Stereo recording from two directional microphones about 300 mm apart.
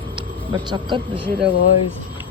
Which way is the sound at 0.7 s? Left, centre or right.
Centre.